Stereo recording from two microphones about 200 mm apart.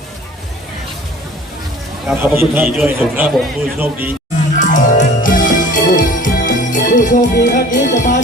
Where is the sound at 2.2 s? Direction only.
10° right (ahead or behind).